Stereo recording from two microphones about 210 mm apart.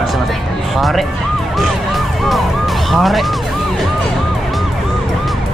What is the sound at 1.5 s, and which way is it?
Police car, centre (ahead or behind).